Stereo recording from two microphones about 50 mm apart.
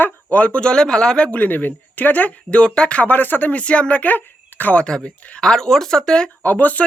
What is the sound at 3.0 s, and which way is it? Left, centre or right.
Speech, left.